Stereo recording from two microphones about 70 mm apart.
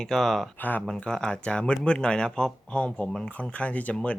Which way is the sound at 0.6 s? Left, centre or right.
Left.